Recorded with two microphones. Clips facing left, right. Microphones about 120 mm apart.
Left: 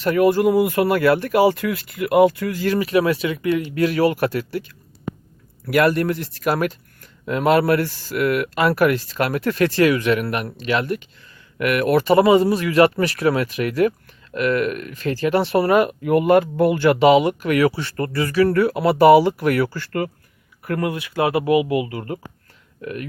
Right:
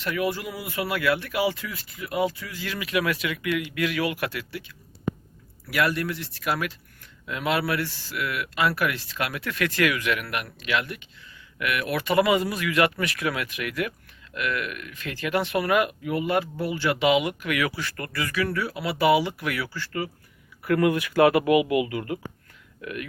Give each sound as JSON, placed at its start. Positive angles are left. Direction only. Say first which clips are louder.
{"t": 0.0, "sound": "speech", "louder": "left 12 dB", "side_deg": 45}
{"t": 1.6, "sound": "speech", "louder": "left 13 dB", "side_deg": 60}
{"t": 5.6, "sound": "speech", "louder": "left 8 dB", "side_deg": 45}
{"t": 16.0, "sound": "speech", "louder": "left 10 dB", "side_deg": 50}
{"t": 18.5, "sound": "speech", "louder": "left 11 dB", "side_deg": 50}
{"t": 20.7, "sound": "speech", "louder": "right 2 dB", "side_deg": 40}
{"t": 20.9, "sound": "speech", "louder": "right 1 dB", "side_deg": 25}